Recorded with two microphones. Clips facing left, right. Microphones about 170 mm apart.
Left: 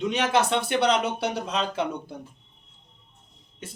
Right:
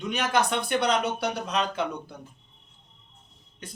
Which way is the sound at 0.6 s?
30° left (ahead or behind).